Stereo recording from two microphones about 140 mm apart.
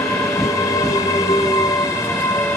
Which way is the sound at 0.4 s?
20° left (ahead or behind).